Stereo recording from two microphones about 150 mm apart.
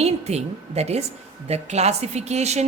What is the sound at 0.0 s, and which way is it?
A woman's voice, 45° right (ahead or behind).